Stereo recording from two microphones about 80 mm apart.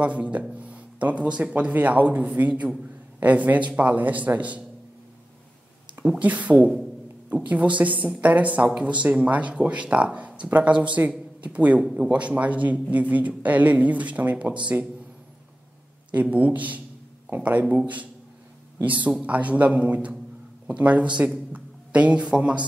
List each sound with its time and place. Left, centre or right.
0.0 s speech: centre
5.9 s speech: centre
16.1 s speech: centre